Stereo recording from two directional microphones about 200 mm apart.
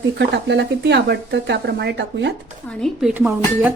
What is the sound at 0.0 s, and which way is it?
Speech, 60° right (ahead or behind).